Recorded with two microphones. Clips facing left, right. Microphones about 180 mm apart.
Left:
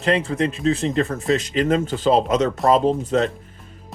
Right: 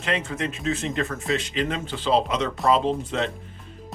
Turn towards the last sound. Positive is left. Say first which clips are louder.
# left 6 dB
turn(degrees=40)  # may be behind; listen again after turning